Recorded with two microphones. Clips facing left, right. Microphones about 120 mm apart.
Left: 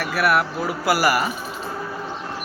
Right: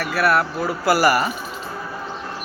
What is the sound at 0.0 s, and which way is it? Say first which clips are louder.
Speech: right 1 dB; 10° left (ahead or behind).